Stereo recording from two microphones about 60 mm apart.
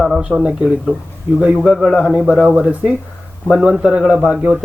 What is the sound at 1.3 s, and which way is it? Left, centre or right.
Speech, centre.